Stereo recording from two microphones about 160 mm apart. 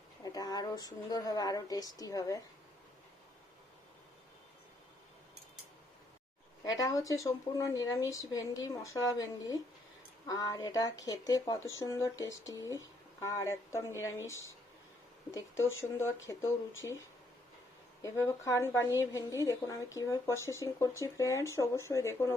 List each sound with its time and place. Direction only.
0.2 s speech: 25° left (ahead or behind)
6.7 s speech: 20° left (ahead or behind)
15.3 s speech: 20° left (ahead or behind)
18.0 s speech: 20° left (ahead or behind)